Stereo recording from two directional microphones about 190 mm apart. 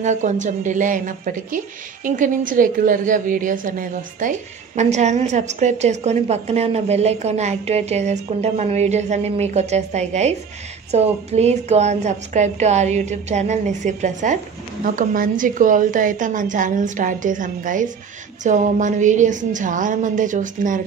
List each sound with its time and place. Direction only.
0.0 s a woman's voice: 40° right (ahead or behind)